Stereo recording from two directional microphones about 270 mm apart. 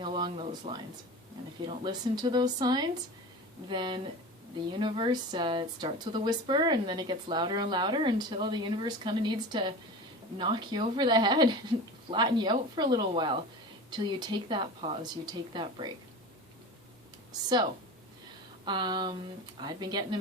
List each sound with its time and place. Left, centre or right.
0.0 s a sound: centre
1.6 s speech: centre
18.6 s speech: centre